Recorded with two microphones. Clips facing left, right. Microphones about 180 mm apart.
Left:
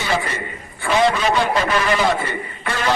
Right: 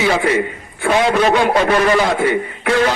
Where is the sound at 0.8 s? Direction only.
55° right (ahead or behind).